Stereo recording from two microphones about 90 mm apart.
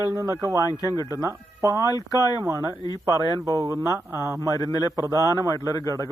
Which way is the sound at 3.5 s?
35° right (ahead or behind).